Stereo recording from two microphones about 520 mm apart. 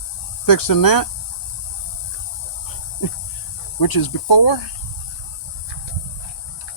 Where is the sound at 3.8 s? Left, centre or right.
Left.